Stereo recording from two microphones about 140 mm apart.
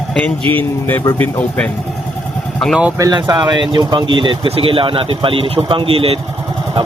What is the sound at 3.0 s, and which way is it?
Speech, 25° right (ahead or behind).